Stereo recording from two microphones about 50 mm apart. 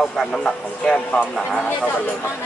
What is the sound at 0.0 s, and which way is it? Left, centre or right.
Speech, centre.